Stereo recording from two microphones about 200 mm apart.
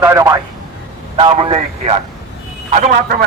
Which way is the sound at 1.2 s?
30° right (ahead or behind).